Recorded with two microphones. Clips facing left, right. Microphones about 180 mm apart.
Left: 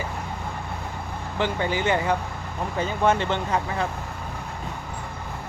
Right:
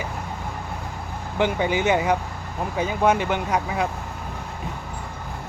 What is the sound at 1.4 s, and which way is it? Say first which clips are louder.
Speech: right 3 dB; 15° right (ahead or behind).